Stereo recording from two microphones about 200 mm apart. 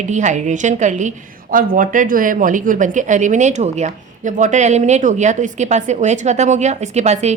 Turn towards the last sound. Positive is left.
turn(degrees=-35)  # may be behind; listen again after turning